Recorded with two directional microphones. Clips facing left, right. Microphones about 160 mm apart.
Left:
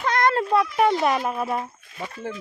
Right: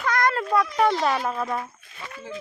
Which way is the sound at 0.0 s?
25° left (ahead or behind).